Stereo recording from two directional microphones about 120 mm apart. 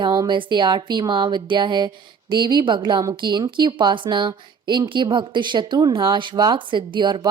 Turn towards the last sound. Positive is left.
turn(degrees=-40)  # may be behind; listen again after turning